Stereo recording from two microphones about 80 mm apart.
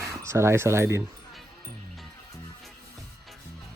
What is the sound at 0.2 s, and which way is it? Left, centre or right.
Speech, right.